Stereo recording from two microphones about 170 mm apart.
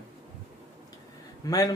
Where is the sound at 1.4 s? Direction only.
20° left (ahead or behind).